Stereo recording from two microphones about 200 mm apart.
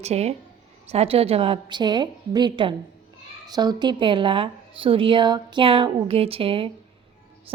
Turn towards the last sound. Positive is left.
turn(degrees=-30)  # may be behind; listen again after turning